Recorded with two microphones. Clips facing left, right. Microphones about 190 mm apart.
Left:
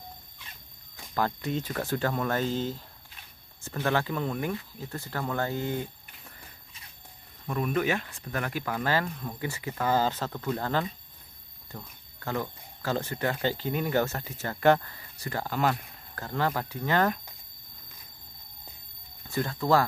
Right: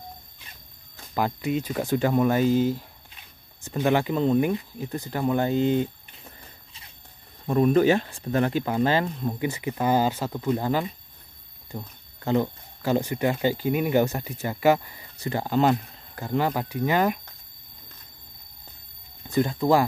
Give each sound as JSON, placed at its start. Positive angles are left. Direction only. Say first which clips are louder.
{"t": 1.1, "sound": "speech", "louder": "right 4 dB", "side_deg": -10}
{"t": 7.4, "sound": "speech", "louder": "right 9 dB", "side_deg": -35}
{"t": 15.1, "sound": "speech", "louder": "right 7 dB", "side_deg": -20}
{"t": 19.2, "sound": "speech", "louder": "right 6 dB", "side_deg": -20}